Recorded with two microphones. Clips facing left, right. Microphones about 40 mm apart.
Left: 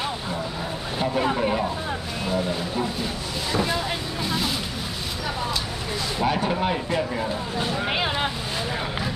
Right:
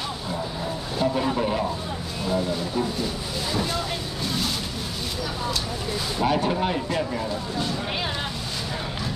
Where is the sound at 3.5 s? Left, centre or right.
Centre.